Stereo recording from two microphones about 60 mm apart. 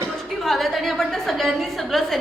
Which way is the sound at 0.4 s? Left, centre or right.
Centre.